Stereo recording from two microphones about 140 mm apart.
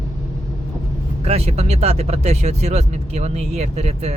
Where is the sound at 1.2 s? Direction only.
50° right (ahead or behind).